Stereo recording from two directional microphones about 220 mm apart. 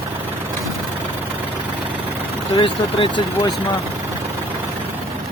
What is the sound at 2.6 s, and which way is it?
Speech, 20° left (ahead or behind).